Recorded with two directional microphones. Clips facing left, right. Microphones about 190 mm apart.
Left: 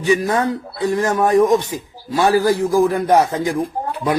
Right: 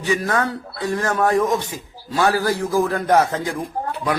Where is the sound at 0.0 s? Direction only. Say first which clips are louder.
Left 4 dB; 15° left (ahead or behind).